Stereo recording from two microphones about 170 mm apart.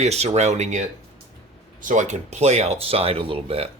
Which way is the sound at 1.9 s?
45° right (ahead or behind).